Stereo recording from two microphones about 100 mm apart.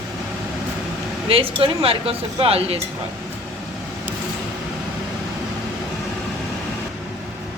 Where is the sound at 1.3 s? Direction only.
70° right (ahead or behind).